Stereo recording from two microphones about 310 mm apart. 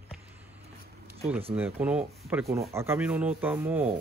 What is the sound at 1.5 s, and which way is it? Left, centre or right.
Speech, centre.